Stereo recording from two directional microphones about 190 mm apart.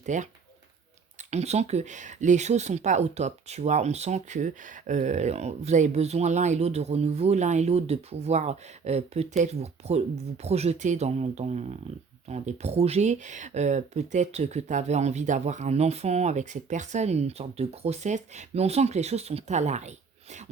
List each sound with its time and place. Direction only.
0.0 s speech: 40° right (ahead or behind)
1.3 s speech: 35° right (ahead or behind)